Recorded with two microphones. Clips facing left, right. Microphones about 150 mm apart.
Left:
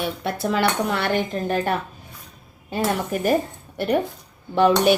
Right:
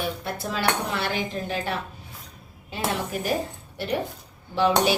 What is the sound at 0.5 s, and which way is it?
Speech, 55° left (ahead or behind).